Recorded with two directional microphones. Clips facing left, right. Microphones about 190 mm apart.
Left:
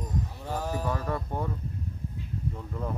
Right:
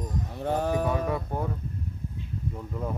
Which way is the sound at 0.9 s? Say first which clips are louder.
Right 3 dB; 10° right (ahead or behind).